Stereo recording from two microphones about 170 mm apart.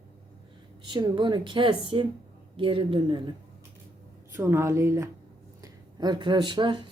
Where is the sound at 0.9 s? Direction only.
25° right (ahead or behind).